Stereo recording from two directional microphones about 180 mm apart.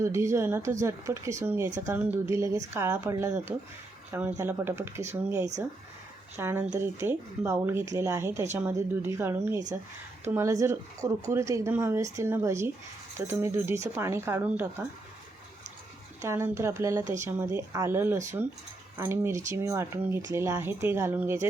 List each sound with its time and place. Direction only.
0.0 s speech: 15° right (ahead or behind)
16.2 s speech: 15° right (ahead or behind)